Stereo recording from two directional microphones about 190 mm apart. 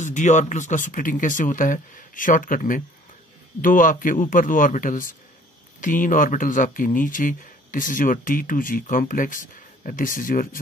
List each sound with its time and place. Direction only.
0.0 s speech: 40° left (ahead or behind)